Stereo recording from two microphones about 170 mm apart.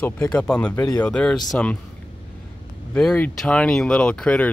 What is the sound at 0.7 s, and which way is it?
Speech, 20° left (ahead or behind).